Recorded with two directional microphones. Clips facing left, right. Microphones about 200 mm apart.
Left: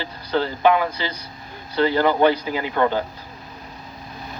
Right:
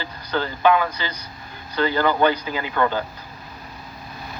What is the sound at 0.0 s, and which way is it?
Speech, 30° left (ahead or behind).